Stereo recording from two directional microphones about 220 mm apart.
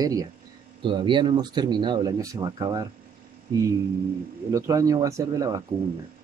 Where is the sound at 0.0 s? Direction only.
15° right (ahead or behind).